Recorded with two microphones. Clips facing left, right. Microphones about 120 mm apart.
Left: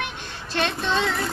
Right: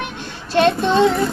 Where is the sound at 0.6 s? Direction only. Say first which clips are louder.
Right 10 dB; 40° right (ahead or behind).